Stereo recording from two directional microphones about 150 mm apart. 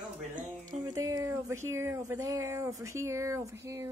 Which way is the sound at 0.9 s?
20° right (ahead or behind).